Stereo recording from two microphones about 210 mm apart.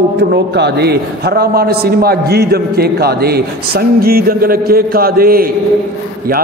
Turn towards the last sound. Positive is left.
turn(degrees=-45)  # may be behind; listen again after turning